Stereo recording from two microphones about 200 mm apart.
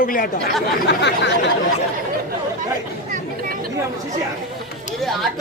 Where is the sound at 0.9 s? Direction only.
60° left (ahead or behind).